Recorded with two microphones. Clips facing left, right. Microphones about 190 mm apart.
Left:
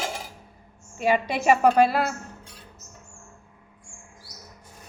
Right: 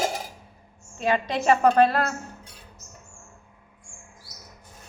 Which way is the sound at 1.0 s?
10° left (ahead or behind).